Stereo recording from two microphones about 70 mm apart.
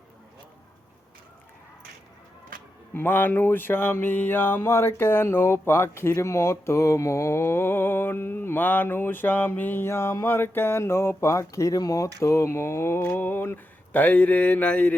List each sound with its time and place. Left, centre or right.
2.9 s mantra: left
12.2 s speech: left